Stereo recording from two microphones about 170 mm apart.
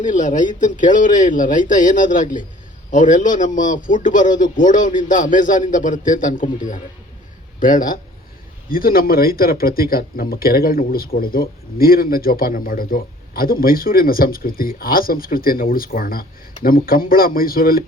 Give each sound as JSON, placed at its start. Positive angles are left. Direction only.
{"t": 0.0, "sound": "a man's voice", "side_deg": 50}